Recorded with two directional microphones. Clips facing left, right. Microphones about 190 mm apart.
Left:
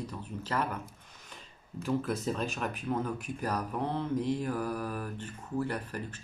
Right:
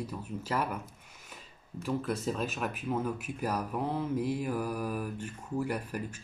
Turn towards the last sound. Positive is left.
turn(degrees=-10)  # may be behind; listen again after turning